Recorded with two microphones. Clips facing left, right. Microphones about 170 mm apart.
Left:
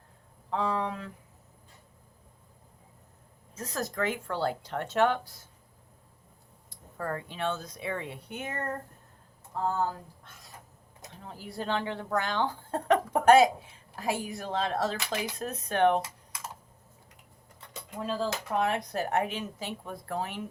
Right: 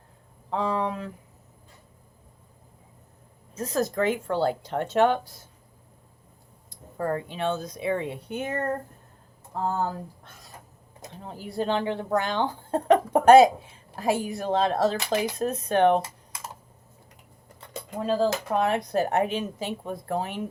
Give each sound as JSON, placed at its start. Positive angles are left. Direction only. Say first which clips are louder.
{"t": 0.5, "sound": "speech", "louder": "right 3 dB", "side_deg": -20}
{"t": 3.5, "sound": "speech", "louder": "right 8 dB", "side_deg": -25}
{"t": 6.7, "sound": "speech", "louder": "right 6 dB", "side_deg": -25}
{"t": 11.1, "sound": "speech", "louder": "right 6 dB", "side_deg": -25}
{"t": 17.9, "sound": "speech", "louder": "right 7 dB", "side_deg": -35}